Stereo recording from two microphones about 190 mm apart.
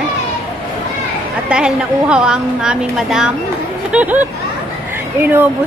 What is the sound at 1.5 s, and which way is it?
A woman's voice, 5° right (ahead or behind).